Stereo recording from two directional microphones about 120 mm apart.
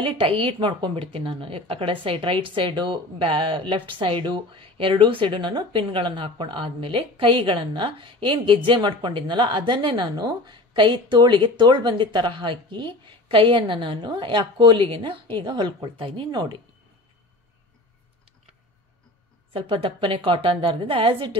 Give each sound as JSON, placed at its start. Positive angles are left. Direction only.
{"t": 0.0, "sound": "speech", "side_deg": -50}
{"t": 19.5, "sound": "speech", "side_deg": -45}